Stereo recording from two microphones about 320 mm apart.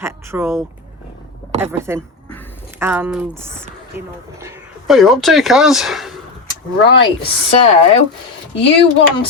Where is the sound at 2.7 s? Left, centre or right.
Centre.